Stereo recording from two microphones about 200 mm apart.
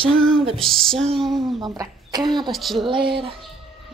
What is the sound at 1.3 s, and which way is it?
Speech, 20° right (ahead or behind).